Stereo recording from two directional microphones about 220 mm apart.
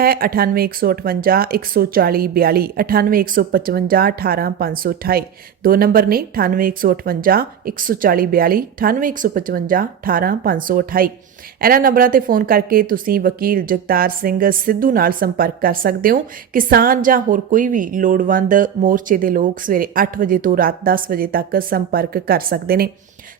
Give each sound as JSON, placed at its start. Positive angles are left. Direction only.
{"t": 0.0, "sound": "speech", "side_deg": -40}